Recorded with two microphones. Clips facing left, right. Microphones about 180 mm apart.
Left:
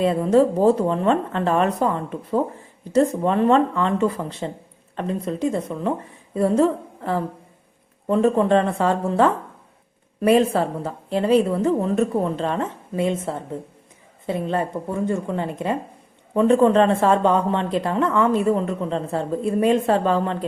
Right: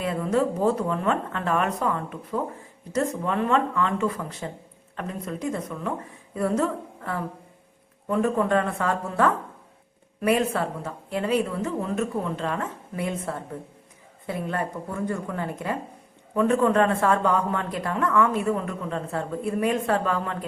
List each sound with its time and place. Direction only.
0.0 s a woman's voice: 30° left (ahead or behind)